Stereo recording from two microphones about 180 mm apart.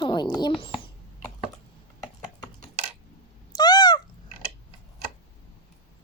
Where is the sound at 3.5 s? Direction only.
20° left (ahead or behind).